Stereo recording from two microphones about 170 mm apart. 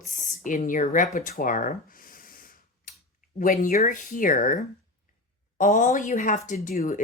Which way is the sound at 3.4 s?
55° left (ahead or behind).